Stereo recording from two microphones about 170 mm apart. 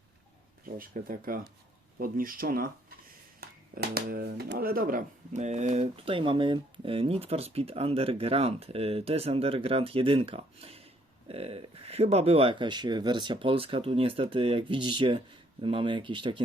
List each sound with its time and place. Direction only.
0.6 s speech: 55° right (ahead or behind); by 16.4 s 30° right (ahead or behind)